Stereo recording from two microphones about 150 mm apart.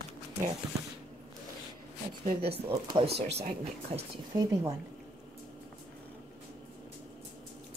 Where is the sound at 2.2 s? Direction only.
40° right (ahead or behind).